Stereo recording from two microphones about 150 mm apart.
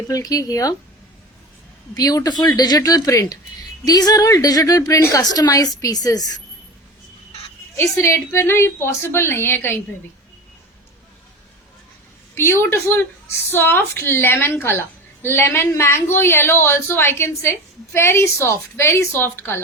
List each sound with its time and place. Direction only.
0.1 s a woman's voice: 25° left (ahead or behind)
2.0 s a woman's voice: 25° left (ahead or behind)
7.8 s a woman's voice: 15° left (ahead or behind)
12.3 s a woman's voice: 15° left (ahead or behind)